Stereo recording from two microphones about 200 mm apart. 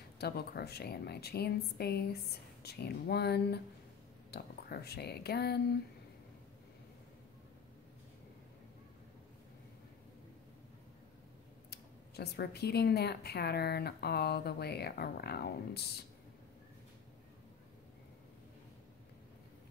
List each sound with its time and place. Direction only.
0.2 s speech: 55° left (ahead or behind)
11.7 s speech: 55° left (ahead or behind)